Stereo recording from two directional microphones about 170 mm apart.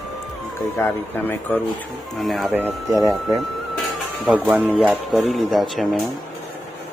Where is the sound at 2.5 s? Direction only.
15° right (ahead or behind).